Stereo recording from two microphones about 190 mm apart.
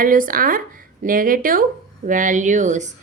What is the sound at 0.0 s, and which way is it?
Speech, 45° right (ahead or behind).